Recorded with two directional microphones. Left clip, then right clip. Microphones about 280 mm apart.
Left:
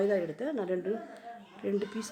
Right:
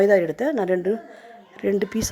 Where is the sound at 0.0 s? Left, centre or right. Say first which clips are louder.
Right 12 dB; right.